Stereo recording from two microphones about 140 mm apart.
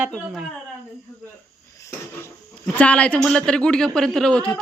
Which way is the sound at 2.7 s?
10° left (ahead or behind).